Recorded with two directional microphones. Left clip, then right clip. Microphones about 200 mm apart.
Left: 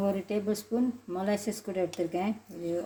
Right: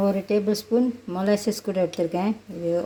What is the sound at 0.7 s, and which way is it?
Speech, 30° right (ahead or behind).